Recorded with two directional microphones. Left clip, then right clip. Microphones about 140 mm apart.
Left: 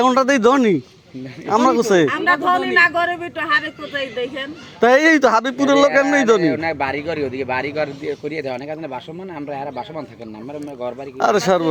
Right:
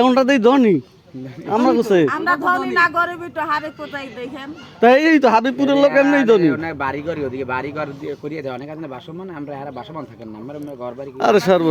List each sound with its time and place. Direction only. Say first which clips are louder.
0.0 s speech: even; 30° right (ahead or behind)
4.8 s speech: even; 20° right (ahead or behind)
10.8 s speech: right 1 dB; 30° right (ahead or behind)